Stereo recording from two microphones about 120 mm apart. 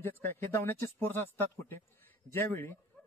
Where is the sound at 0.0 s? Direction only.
15° left (ahead or behind).